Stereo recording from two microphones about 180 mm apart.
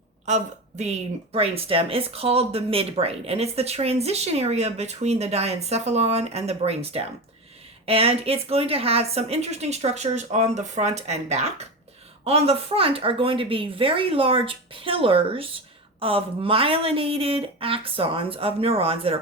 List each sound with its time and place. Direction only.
0.3 s speech: 40° right (ahead or behind)